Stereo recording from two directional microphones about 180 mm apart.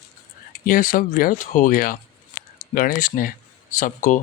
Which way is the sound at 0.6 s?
50° left (ahead or behind).